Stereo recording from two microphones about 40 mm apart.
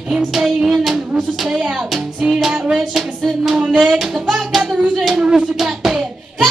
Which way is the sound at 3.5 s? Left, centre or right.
Right.